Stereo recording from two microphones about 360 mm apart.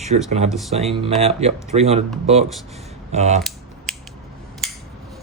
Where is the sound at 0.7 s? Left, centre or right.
Centre.